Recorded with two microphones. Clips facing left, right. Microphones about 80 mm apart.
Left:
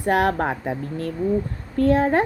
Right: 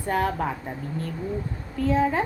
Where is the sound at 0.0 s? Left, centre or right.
Left.